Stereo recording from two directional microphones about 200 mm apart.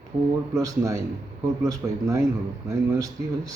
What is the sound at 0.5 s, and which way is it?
Speech, 15° right (ahead or behind).